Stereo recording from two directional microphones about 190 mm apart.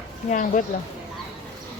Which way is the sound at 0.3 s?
40° left (ahead or behind).